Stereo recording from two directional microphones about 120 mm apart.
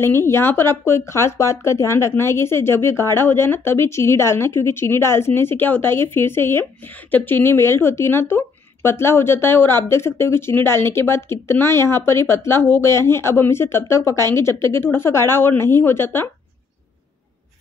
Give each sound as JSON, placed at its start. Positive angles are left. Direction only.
{"t": 0.0, "sound": "speech", "side_deg": 20}